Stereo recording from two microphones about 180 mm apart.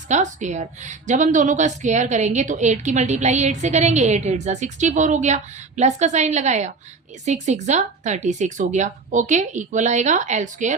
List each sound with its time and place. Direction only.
0.1 s a woman's voice: 40° right (ahead or behind)